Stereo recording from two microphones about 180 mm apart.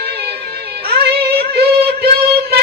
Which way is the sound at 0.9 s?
60° right (ahead or behind).